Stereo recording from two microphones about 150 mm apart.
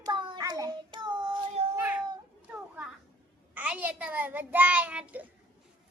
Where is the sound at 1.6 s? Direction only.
45° right (ahead or behind).